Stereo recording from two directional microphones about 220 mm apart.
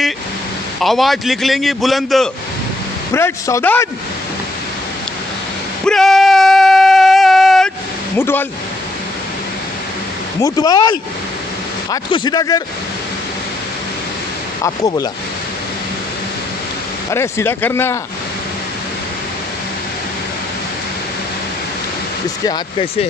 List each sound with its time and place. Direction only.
0.7 s a man's voice: centre (ahead or behind)
3.1 s a man's voice: 10° left (ahead or behind)
5.9 s a sound: centre (ahead or behind)
8.2 s a man's voice: 10° left (ahead or behind)
10.4 s a man's voice: 15° left (ahead or behind)
14.6 s a man's voice: 15° left (ahead or behind)
17.1 s a man's voice: 10° left (ahead or behind)